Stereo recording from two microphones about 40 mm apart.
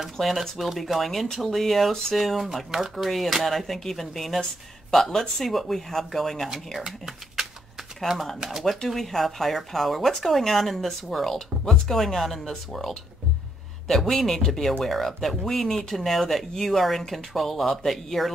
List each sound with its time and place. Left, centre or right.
0.2 s speech: centre
3.1 s speech: centre
8.4 s speech: centre
8.8 s speech: centre
11.3 s speech: centre